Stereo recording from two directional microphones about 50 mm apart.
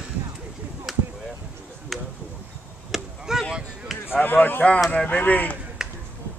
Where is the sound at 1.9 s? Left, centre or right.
Centre.